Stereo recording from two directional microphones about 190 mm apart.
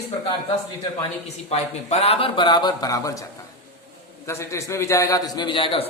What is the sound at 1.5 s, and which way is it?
Speech, 30° left (ahead or behind).